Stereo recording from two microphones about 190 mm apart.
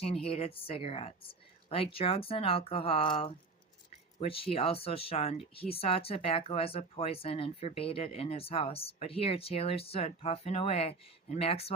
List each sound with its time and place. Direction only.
0.0 s a woman's voice: 30° left (ahead or behind)